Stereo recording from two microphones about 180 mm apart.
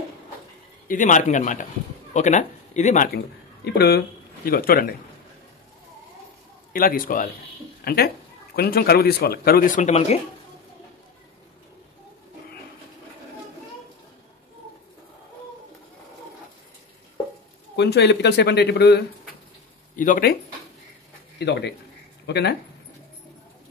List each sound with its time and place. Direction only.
0.8 s a man's voice: 45° left (ahead or behind)
3.6 s speech: 65° left (ahead or behind)
4.5 s a man's voice: 55° left (ahead or behind)
6.7 s a man's voice: 55° left (ahead or behind); by 10.1 s 40° left (ahead or behind)
17.7 s speech: 70° left (ahead or behind)
20.0 s a man's voice: 50° left (ahead or behind)
21.4 s speech: 70° left (ahead or behind)